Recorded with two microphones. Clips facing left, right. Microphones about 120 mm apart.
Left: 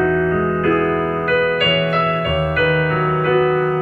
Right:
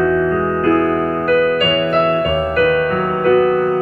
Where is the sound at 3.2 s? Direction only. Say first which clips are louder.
Right 4 dB; 35° right (ahead or behind).